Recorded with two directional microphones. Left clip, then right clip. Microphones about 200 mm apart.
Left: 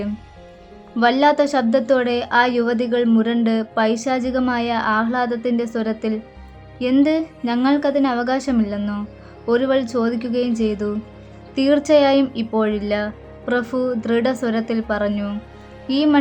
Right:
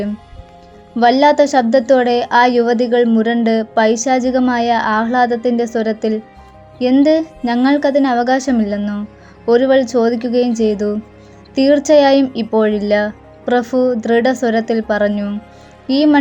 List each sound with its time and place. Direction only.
0.9 s a woman's voice: 20° right (ahead or behind)